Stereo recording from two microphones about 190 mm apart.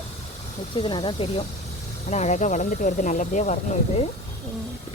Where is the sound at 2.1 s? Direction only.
40° left (ahead or behind).